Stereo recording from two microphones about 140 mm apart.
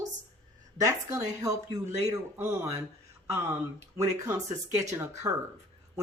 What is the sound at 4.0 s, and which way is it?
Speech, 20° right (ahead or behind).